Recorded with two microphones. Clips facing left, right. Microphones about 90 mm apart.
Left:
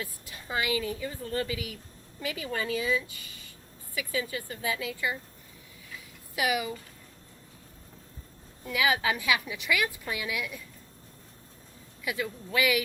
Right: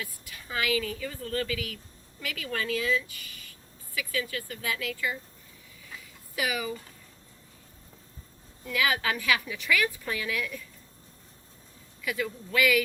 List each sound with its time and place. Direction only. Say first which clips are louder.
0.0 s a woman's voice: left 1 dB; 25° left (ahead or behind)
8.6 s a woman's voice: left 1 dB; 20° left (ahead or behind)
12.0 s a woman's voice: right 1 dB; 20° left (ahead or behind)